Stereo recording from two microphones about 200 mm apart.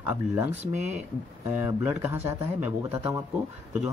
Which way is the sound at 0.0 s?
10° right (ahead or behind).